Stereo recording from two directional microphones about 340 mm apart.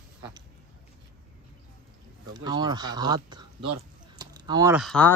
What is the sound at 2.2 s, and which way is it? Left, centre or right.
Speech, centre.